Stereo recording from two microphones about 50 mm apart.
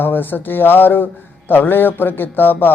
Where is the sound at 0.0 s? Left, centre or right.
Left.